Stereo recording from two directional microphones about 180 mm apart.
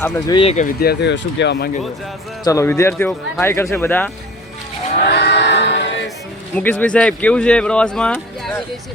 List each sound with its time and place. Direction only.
0.3 s speech: 30° left (ahead or behind)
0.5 s speech: 55° left (ahead or behind); by 1.7 s 70° left (ahead or behind)
2.4 s speech: 15° left (ahead or behind)
5.0 s choir: 70° left (ahead or behind)
6.6 s speech: 10° left (ahead or behind)